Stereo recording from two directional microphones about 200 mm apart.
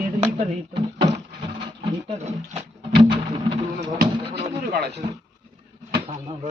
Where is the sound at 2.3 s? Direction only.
30° right (ahead or behind).